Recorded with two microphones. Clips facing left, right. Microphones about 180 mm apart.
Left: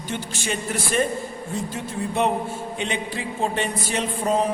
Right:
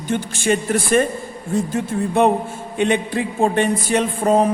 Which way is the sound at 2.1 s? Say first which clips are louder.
Right 6 dB; 50° right (ahead or behind).